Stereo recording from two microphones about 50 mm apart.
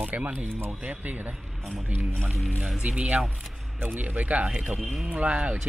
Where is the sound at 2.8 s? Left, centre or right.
Centre.